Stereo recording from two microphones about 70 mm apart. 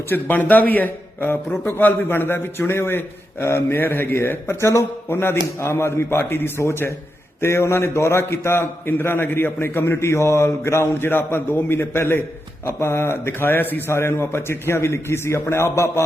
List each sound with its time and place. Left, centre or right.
0.1 s a man's voice: left